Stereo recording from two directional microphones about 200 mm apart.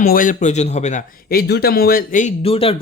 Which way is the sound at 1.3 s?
50° left (ahead or behind).